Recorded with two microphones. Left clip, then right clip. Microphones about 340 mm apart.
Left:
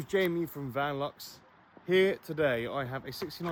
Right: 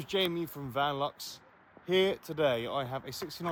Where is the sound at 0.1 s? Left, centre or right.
Centre.